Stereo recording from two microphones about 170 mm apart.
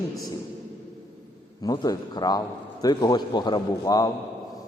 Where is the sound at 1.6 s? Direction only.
20° left (ahead or behind).